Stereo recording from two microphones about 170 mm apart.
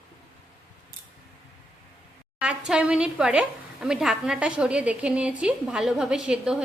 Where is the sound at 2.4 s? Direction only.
5° right (ahead or behind).